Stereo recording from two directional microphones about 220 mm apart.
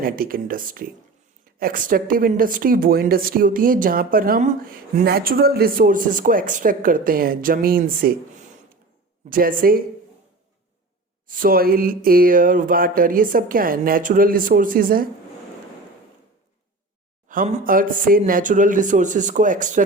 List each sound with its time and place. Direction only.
0.0 s speech: 40° right (ahead or behind)
9.3 s speech: 40° right (ahead or behind)
11.3 s speech: 40° right (ahead or behind)
17.2 s speech: 40° right (ahead or behind)